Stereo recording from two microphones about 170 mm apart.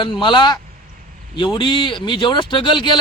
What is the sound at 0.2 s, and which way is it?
A man's voice, 30° left (ahead or behind).